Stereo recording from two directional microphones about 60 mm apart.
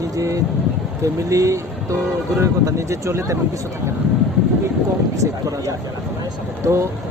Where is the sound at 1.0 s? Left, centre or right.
Right.